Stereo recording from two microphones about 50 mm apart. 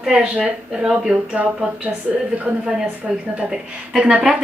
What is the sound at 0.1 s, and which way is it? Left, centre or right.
Speech, right.